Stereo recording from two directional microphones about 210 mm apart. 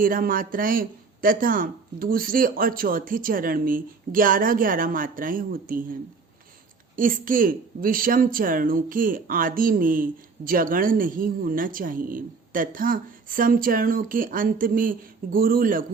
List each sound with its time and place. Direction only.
0.0 s speech: 40° right (ahead or behind)
6.9 s speech: 40° right (ahead or behind)